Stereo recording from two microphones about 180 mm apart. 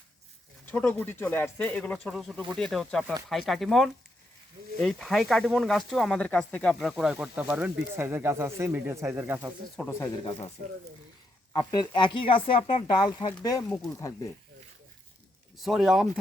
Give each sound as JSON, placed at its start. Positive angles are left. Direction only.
{"t": 0.6, "sound": "speech", "side_deg": 10}
{"t": 11.5, "sound": "speech", "side_deg": 25}
{"t": 15.6, "sound": "speech", "side_deg": 0}